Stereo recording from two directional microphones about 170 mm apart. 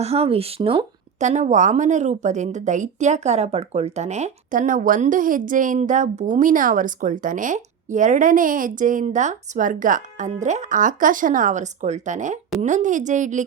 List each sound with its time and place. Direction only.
0.0 s speech: 35° right (ahead or behind)
1.2 s speech: 45° right (ahead or behind)